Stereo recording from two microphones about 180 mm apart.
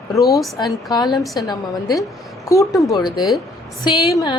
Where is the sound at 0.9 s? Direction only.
25° left (ahead or behind).